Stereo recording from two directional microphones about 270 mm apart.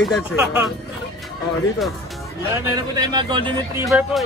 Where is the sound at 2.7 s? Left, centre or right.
Centre.